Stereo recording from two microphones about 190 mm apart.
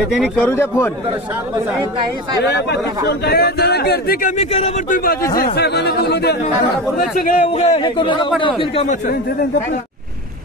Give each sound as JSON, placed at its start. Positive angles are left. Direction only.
{"t": 0.2, "sound": "speech", "side_deg": 10}
{"t": 3.1, "sound": "speech", "side_deg": 55}
{"t": 4.4, "sound": "speech", "side_deg": 35}
{"t": 7.0, "sound": "a man's voice", "side_deg": 45}